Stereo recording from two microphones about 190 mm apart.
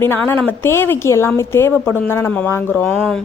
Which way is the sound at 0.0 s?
10° left (ahead or behind).